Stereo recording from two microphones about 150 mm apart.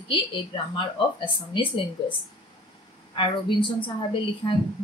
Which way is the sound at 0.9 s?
35° left (ahead or behind).